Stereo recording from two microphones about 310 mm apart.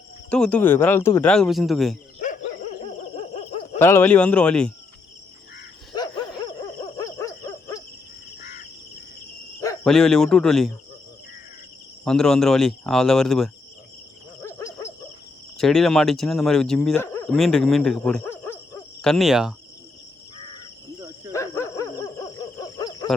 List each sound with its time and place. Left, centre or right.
0.3 s speech: centre
2.1 s dog: left
3.2 s owl: centre
3.8 s speech: centre
6.4 s owl: centre
9.6 s speech: centre
12.0 s speech: centre
14.4 s a sound: centre
15.5 s speech: centre
21.3 s a sound: centre